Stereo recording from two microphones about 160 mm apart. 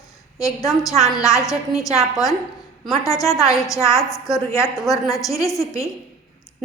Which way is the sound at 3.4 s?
20° left (ahead or behind).